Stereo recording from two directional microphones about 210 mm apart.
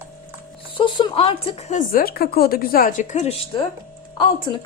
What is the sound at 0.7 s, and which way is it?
A woman's voice, 25° left (ahead or behind).